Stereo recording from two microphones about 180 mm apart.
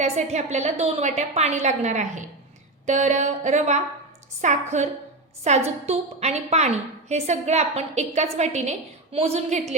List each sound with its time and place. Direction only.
0.0 s a woman's voice: 40° right (ahead or behind)